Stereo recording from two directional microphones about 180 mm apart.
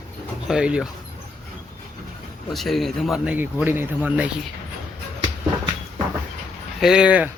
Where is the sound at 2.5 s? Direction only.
Centre (ahead or behind).